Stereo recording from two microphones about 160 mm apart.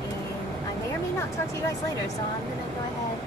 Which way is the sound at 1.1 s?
20° left (ahead or behind).